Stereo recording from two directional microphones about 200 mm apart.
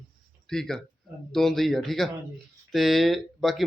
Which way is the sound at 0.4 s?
Centre (ahead or behind).